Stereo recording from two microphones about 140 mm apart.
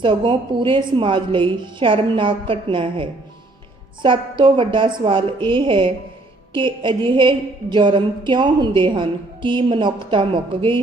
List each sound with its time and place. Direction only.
0.0 s a woman's voice: 40° right (ahead or behind)